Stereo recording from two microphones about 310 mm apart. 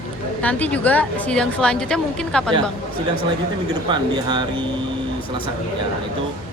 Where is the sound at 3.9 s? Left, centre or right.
Centre.